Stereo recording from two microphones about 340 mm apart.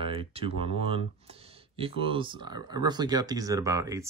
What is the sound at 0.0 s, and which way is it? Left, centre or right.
Speech, centre.